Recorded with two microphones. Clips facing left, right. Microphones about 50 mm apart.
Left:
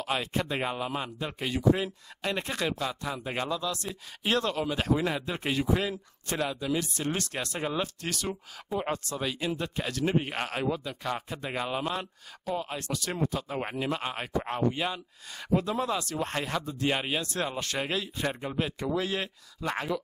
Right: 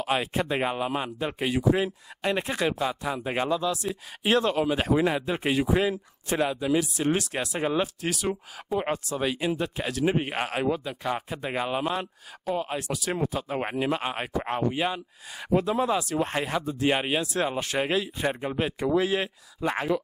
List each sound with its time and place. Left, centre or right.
0.0 s speech: centre